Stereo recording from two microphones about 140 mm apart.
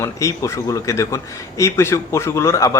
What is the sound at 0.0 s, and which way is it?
Speech, 20° left (ahead or behind).